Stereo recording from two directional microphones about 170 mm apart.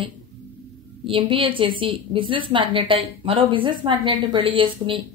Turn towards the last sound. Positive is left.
turn(degrees=-30)  # may be behind; listen again after turning